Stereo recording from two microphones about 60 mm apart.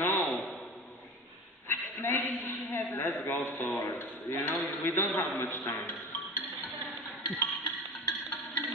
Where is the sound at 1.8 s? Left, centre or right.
Left.